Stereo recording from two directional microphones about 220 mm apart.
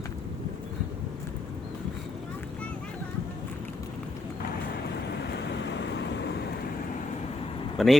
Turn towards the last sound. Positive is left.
turn(degrees=0)  # may be behind; listen again after turning